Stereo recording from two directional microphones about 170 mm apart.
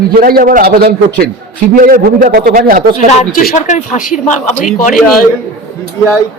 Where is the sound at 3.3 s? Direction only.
50° left (ahead or behind).